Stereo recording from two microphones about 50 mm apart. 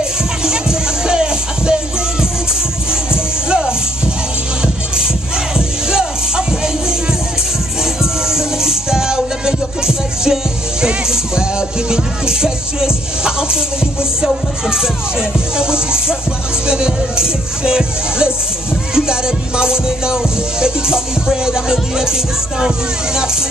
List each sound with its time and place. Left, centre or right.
0.4 s music: centre
3.4 s music: centre